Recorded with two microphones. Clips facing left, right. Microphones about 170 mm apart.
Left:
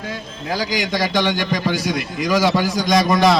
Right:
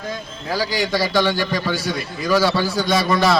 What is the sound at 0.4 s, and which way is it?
A man's voice, 15° left (ahead or behind).